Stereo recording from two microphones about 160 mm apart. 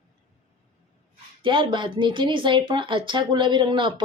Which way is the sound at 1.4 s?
30° right (ahead or behind).